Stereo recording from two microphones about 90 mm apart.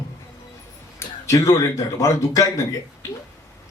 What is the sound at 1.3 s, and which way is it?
A man's voice, 35° left (ahead or behind).